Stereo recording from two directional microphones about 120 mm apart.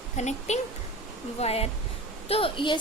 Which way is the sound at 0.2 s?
70° left (ahead or behind).